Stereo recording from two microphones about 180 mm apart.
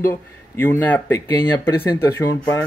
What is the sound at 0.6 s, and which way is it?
Speech, 10° left (ahead or behind).